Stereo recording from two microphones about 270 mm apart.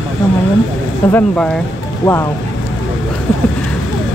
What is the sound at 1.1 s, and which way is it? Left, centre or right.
Speech, centre.